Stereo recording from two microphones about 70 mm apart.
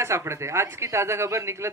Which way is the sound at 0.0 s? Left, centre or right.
Right.